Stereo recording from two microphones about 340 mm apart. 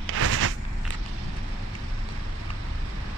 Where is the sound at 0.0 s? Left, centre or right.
Right.